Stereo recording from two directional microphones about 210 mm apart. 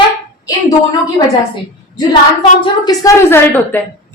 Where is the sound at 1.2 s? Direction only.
15° left (ahead or behind).